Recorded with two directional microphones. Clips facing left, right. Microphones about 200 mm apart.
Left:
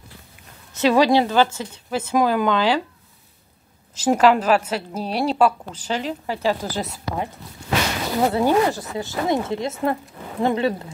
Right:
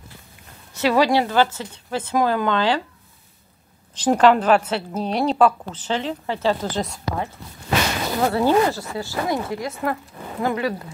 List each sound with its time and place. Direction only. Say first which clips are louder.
0.7 s a woman's voice: left 2 dB; 20° left (ahead or behind)
3.9 s a woman's voice: right 1 dB; 5° left (ahead or behind); by 10.7 s 25° left (ahead or behind)